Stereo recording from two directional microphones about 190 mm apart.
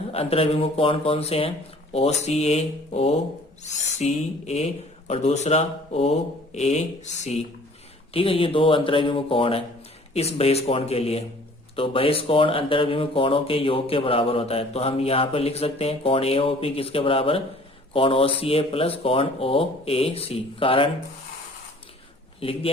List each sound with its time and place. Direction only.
0.1 s speech: 30° left (ahead or behind)
22.4 s a man's voice: 30° left (ahead or behind)